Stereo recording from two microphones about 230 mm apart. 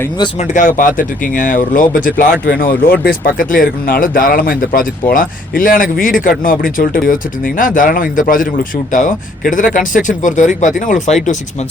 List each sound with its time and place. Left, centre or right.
0.2 s speech: left